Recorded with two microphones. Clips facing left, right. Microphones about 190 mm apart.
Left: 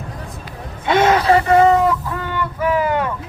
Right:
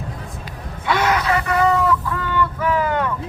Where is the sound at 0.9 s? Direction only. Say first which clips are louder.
Left 5 dB; 25° left (ahead or behind).